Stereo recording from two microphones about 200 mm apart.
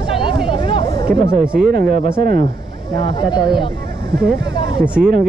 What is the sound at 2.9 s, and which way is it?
Speech, 25° left (ahead or behind).